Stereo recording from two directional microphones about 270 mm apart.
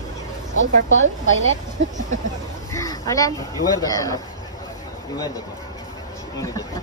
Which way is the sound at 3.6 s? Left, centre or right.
Centre.